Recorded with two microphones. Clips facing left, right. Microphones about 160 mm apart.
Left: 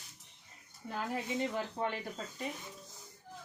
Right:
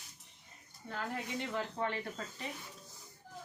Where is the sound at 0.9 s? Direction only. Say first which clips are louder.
Left 3 dB; 10° left (ahead or behind).